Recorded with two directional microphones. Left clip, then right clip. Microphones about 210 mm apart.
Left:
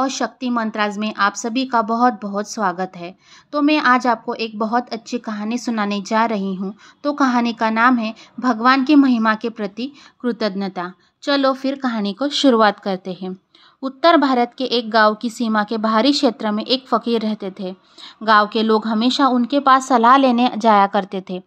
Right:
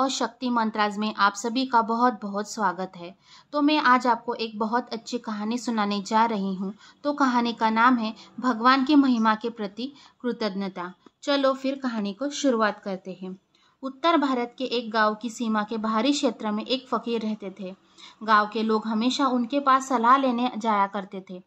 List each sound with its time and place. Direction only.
0.0 s a woman's voice: 10° left (ahead or behind); by 21.4 s 30° left (ahead or behind)